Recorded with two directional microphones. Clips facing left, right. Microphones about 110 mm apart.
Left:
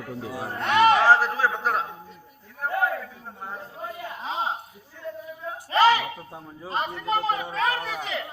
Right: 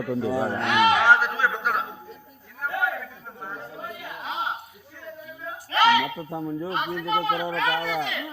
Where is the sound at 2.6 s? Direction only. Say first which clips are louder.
Left 2 dB; 35° left (ahead or behind).